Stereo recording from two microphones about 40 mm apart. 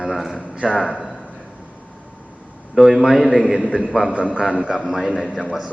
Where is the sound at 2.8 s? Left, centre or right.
Centre.